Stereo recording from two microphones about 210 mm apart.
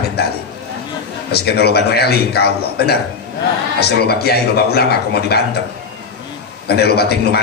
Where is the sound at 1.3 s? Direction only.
50° left (ahead or behind).